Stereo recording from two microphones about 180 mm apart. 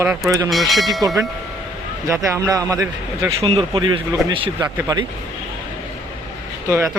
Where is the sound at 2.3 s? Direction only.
15° right (ahead or behind).